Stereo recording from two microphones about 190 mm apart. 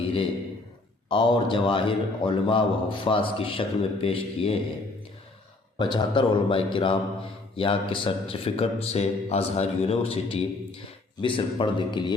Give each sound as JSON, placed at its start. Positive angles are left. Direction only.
{"t": 0.0, "sound": "a sound", "side_deg": 30}
{"t": 1.1, "sound": "a man's voice", "side_deg": 25}
{"t": 5.8, "sound": "a man's voice", "side_deg": 25}